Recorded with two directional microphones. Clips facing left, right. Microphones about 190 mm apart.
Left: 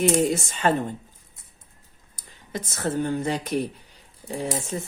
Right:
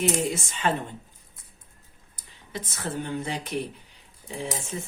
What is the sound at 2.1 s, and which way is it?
Speech, 45° left (ahead or behind).